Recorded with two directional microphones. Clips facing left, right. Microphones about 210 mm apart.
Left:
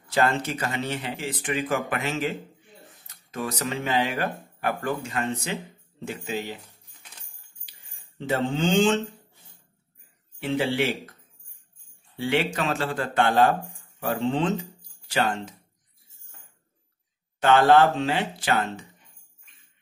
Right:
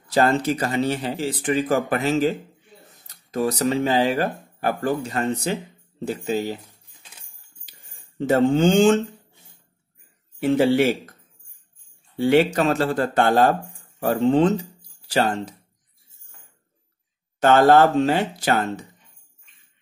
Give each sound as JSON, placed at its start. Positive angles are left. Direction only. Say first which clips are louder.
{"t": 0.1, "sound": "speech", "louder": "right 5 dB", "side_deg": -35}
{"t": 8.2, "sound": "speech", "louder": "right 8 dB", "side_deg": -45}
{"t": 10.4, "sound": "speech", "louder": "right 7 dB", "side_deg": -45}
{"t": 12.2, "sound": "speech", "louder": "right 8 dB", "side_deg": -40}
{"t": 17.4, "sound": "speech", "louder": "right 3 dB", "side_deg": -45}